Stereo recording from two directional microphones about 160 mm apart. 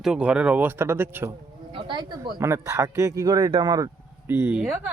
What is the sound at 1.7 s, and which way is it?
Speech, 30° right (ahead or behind).